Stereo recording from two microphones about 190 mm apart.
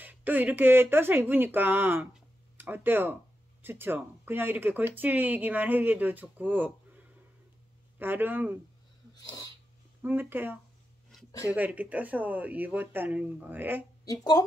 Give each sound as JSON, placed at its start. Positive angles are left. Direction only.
{"t": 0.0, "sound": "speech", "side_deg": -10}
{"t": 8.0, "sound": "speech", "side_deg": -10}
{"t": 9.1, "sound": "wheeze", "side_deg": 20}
{"t": 10.0, "sound": "speech", "side_deg": -10}
{"t": 14.0, "sound": "speech", "side_deg": 20}